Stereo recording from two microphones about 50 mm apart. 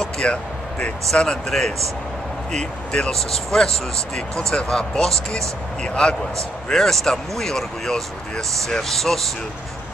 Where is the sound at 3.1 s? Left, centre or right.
Centre.